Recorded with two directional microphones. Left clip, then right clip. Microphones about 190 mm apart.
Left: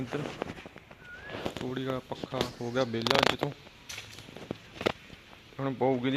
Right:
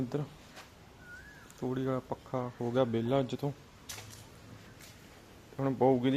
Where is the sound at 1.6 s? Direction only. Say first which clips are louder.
Right 5 dB; 10° right (ahead or behind).